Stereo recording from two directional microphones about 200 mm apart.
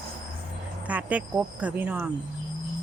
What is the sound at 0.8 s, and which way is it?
Speech, 5° right (ahead or behind).